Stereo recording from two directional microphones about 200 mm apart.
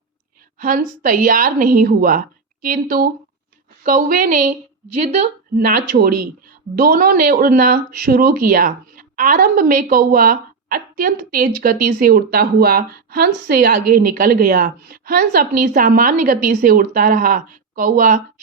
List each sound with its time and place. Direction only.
0.6 s a woman's voice: 45° right (ahead or behind)
5.5 s speech: 45° right (ahead or behind)